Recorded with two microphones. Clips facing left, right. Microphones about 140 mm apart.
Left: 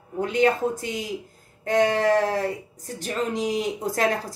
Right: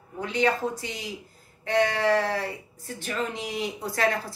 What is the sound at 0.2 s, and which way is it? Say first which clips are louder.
Speech: left 4 dB; 45° left (ahead or behind).